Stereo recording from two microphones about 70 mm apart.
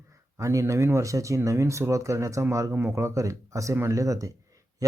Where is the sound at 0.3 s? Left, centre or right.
Right.